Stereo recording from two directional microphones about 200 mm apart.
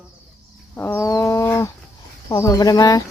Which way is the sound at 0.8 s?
10° left (ahead or behind).